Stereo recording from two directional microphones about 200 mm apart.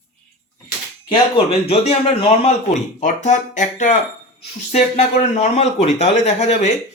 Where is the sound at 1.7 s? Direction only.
30° left (ahead or behind).